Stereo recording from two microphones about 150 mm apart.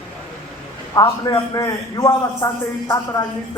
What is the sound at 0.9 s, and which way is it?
A man's voice, 25° left (ahead or behind).